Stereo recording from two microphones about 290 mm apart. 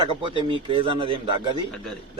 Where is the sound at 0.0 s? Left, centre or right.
Centre.